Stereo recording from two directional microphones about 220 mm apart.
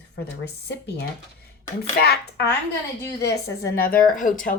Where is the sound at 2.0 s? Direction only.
45° left (ahead or behind).